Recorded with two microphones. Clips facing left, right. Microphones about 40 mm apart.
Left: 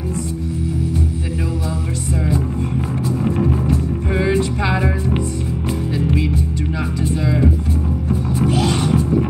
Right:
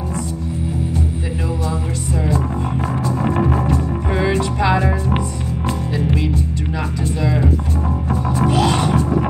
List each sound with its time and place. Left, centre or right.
3.3 s music: right
8.5 s music: right